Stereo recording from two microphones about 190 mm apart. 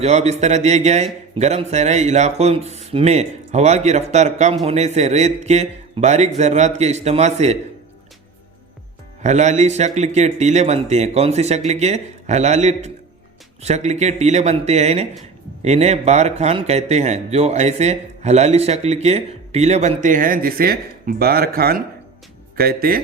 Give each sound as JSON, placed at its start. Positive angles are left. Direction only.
{"t": 0.0, "sound": "speech", "side_deg": -35}
{"t": 9.2, "sound": "speech", "side_deg": -35}